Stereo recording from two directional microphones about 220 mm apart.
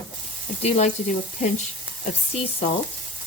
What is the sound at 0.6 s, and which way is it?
Speech, 30° left (ahead or behind).